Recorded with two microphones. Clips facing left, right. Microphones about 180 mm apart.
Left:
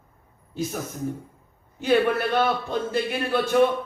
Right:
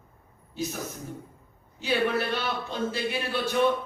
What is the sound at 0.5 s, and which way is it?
Speech, 50° left (ahead or behind).